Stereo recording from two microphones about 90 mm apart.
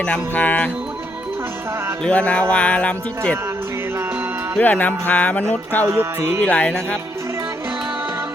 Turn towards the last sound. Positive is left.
turn(degrees=15)  # may be behind; listen again after turning